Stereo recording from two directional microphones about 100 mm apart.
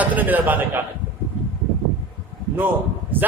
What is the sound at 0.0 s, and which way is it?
Speech, 15° right (ahead or behind).